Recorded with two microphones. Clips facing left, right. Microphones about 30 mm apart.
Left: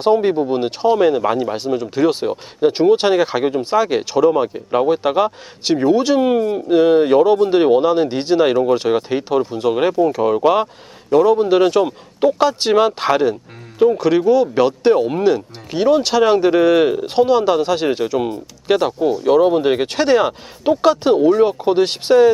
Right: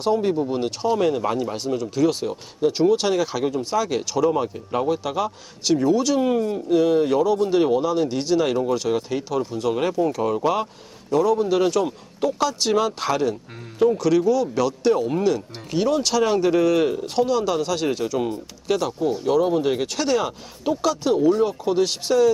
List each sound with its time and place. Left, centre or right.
0.0 s speech: left